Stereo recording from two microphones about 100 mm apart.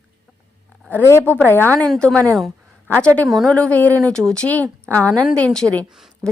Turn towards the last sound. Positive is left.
turn(degrees=-5)  # may be behind; listen again after turning